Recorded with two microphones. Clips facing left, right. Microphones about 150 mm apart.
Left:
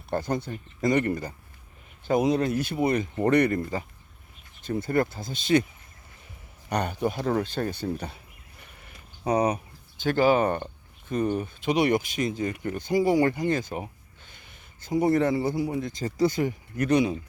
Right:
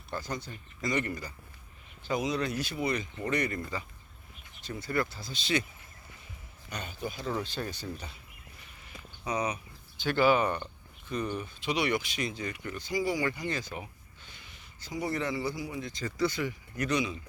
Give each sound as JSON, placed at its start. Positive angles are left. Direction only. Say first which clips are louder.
{"t": 0.1, "sound": "speech", "louder": "left 9 dB", "side_deg": 55}
{"t": 4.6, "sound": "speech", "louder": "left 7 dB", "side_deg": 50}
{"t": 6.7, "sound": "speech", "louder": "left 11 dB", "side_deg": 65}
{"t": 8.6, "sound": "a sound", "louder": "right 1 dB", "side_deg": 55}
{"t": 10.0, "sound": "speech", "louder": "left 4 dB", "side_deg": 40}